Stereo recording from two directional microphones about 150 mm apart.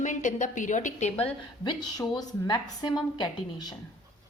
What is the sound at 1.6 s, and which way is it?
A woman's voice, 30° left (ahead or behind).